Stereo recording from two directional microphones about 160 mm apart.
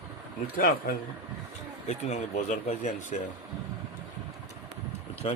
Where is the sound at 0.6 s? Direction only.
60° left (ahead or behind).